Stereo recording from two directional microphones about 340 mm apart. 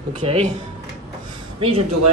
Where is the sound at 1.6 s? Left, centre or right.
Centre.